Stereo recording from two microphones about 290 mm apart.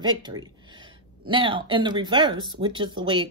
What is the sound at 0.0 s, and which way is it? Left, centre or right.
A woman's voice, centre.